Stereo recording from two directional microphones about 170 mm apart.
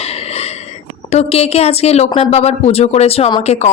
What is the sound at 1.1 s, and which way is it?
Speech, 35° left (ahead or behind).